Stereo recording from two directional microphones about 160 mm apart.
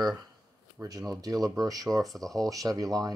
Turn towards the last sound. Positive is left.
turn(degrees=-20)  # may be behind; listen again after turning